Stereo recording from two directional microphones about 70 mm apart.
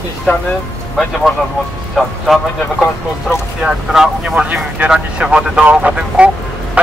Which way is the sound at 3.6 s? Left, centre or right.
Centre.